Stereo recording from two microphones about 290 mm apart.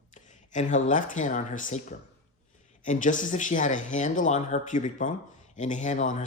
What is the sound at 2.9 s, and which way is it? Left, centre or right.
Speech, left.